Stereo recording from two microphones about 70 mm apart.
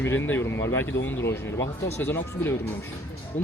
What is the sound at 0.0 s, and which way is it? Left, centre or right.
Speech, left.